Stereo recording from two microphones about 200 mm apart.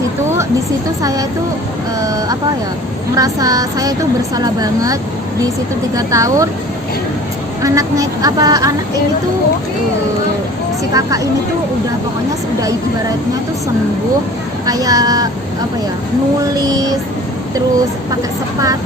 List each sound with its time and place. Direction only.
1.0 s speech: 20° right (ahead or behind)
6.0 s speech: 15° right (ahead or behind)
7.6 s speech: 15° right (ahead or behind)
10.9 s speech: 15° right (ahead or behind)
14.7 s speech: 20° right (ahead or behind)
16.6 s a sound: 20° right (ahead or behind)